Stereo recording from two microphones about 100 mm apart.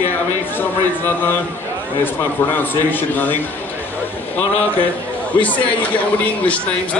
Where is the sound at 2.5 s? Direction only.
20° left (ahead or behind).